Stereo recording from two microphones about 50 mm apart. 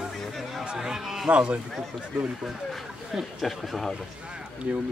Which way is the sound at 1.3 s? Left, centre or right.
Right.